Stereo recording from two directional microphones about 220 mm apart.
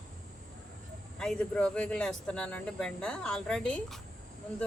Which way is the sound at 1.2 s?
5° left (ahead or behind).